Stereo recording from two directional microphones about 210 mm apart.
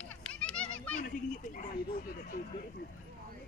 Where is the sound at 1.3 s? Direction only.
40° left (ahead or behind).